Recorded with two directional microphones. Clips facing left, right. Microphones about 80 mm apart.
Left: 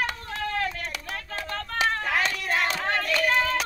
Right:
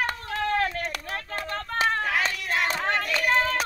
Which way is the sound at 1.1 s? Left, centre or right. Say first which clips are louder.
Even; right.